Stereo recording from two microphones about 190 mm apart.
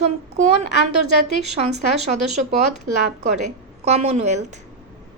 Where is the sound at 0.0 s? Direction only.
35° right (ahead or behind).